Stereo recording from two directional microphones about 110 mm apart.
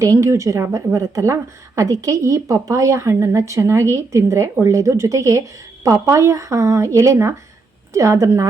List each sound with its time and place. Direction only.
0.0 s speech: 30° right (ahead or behind)